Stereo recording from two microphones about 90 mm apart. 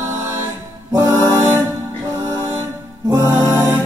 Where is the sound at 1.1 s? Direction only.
30° right (ahead or behind).